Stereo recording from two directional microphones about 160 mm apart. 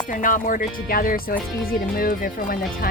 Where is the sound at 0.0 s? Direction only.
55° left (ahead or behind).